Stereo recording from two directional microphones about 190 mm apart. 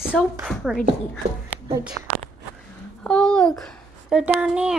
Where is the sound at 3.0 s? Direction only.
5° left (ahead or behind).